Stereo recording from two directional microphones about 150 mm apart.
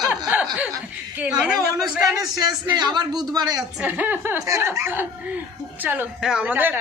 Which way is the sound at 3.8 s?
10° right (ahead or behind).